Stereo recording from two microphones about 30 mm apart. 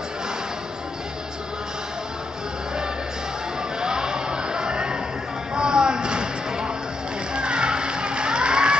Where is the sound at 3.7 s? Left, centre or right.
Right.